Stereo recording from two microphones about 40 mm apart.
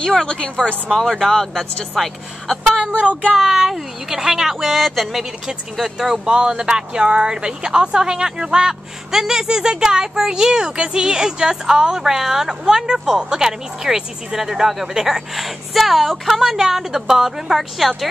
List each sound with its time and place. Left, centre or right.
0.2 s a woman's voice: left
0.8 s speech: centre
2.7 s speech: right
3.3 s speech: centre
5.8 s speech: centre